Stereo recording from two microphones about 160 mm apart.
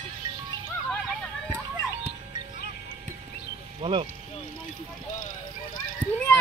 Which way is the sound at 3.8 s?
30° right (ahead or behind).